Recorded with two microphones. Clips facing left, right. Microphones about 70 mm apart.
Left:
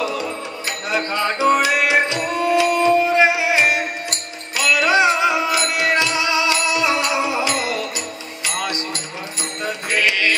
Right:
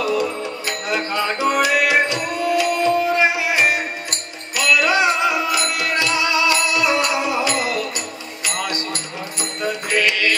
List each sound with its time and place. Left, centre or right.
0.7 s music: left
8.6 s music: left